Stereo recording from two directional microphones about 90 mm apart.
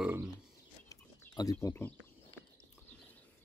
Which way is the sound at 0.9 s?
40° left (ahead or behind).